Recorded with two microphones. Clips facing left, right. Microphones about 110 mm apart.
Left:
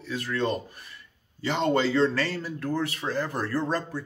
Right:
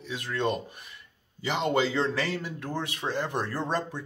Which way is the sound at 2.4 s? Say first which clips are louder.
Left 5 dB; 15° right (ahead or behind).